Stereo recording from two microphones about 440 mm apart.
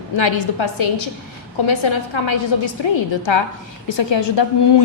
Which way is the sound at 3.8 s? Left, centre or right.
Left.